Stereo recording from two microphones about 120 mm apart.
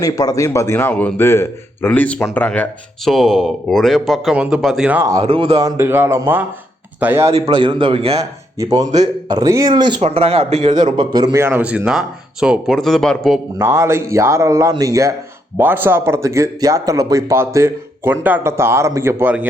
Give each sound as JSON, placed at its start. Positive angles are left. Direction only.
{"t": 0.0, "sound": "a man's voice", "side_deg": 30}
{"t": 3.0, "sound": "speech", "side_deg": 0}
{"t": 5.2, "sound": "speech", "side_deg": -50}
{"t": 5.6, "sound": "speech", "side_deg": -20}
{"t": 7.3, "sound": "a man's voice", "side_deg": -55}
{"t": 8.5, "sound": "speech", "side_deg": -30}
{"t": 10.0, "sound": "speech", "side_deg": -60}
{"t": 10.9, "sound": "speech", "side_deg": -35}
{"t": 11.3, "sound": "speech", "side_deg": -15}
{"t": 13.6, "sound": "speech", "side_deg": -20}
{"t": 15.5, "sound": "speech", "side_deg": -15}